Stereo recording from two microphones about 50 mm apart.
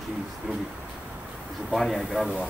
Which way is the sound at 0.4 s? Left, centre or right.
Right.